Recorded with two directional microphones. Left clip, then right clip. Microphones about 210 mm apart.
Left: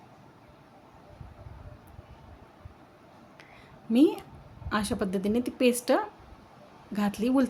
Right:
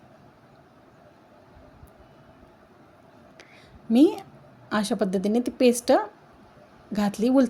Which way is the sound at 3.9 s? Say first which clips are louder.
Right 4 dB; 20° right (ahead or behind).